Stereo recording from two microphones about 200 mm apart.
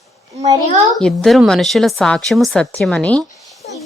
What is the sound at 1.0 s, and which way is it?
A woman's voice, centre (ahead or behind).